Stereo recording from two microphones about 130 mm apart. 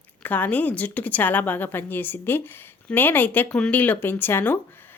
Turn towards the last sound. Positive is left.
turn(degrees=15)  # may be behind; listen again after turning